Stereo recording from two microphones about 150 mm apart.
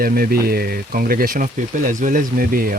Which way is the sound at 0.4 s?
90° right.